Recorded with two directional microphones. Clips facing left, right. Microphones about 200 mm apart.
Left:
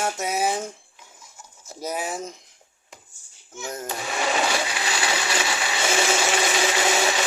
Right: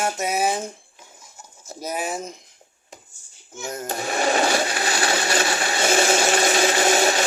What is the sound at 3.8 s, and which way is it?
Blender, 45° right (ahead or behind).